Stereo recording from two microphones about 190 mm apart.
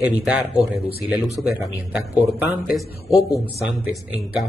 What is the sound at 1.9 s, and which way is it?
A man's voice, 5° right (ahead or behind).